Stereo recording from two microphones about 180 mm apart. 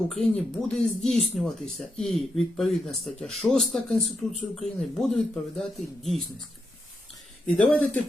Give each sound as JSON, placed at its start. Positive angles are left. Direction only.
{"t": 0.1, "sound": "speech", "side_deg": 0}
{"t": 7.4, "sound": "speech", "side_deg": 5}